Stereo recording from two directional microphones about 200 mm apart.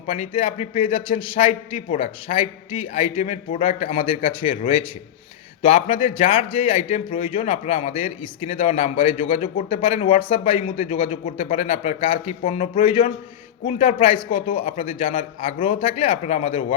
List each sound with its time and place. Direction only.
0.1 s a man's voice: 30° left (ahead or behind)